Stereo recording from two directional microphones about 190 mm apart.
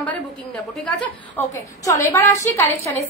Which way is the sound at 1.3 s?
15° left (ahead or behind).